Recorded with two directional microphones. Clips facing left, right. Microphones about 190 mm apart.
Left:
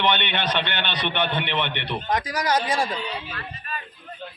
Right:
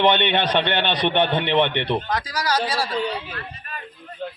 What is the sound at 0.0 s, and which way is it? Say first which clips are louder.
A man's voice: right 5 dB; 30° right (ahead or behind).